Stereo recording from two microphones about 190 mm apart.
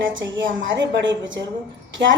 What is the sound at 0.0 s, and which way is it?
A woman's voice, 80° right.